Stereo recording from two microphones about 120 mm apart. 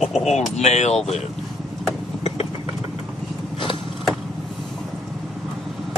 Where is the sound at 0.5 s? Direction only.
70° left (ahead or behind).